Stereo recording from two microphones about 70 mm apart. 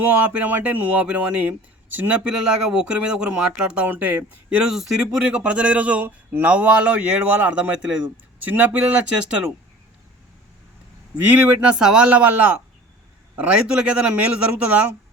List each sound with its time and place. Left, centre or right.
0.0 s speech: right
8.4 s speech: right
11.3 s speech: right